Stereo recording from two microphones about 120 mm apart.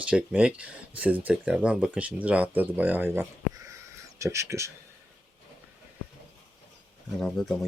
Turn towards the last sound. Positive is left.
turn(degrees=0)  # may be behind; listen again after turning